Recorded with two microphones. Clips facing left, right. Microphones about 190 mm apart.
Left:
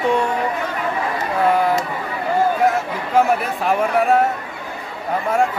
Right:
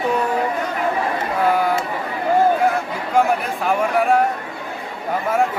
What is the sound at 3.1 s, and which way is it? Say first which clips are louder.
A man's voice: left 1 dB; centre (ahead or behind).